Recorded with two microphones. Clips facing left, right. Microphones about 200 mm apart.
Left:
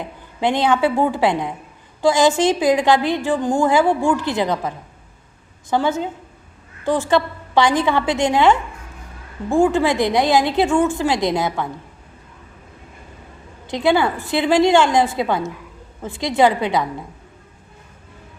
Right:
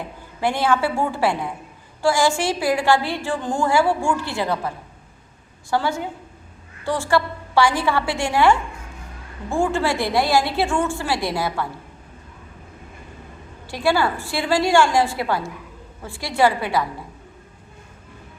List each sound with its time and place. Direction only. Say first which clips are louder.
0.0 s a woman's voice: left 2 dB; 20° left (ahead or behind)
5.7 s a woman's voice: left 3 dB; 20° left (ahead or behind)
13.7 s a woman's voice: left 3 dB; 20° left (ahead or behind)